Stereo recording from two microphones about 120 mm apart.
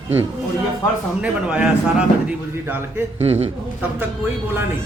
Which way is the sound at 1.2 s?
10° right (ahead or behind).